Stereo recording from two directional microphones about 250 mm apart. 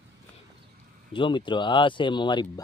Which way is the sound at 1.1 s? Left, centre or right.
Centre.